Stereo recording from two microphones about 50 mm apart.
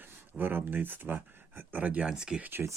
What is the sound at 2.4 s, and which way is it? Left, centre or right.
Speech, right.